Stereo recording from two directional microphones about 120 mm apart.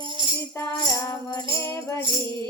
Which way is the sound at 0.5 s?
25° left (ahead or behind).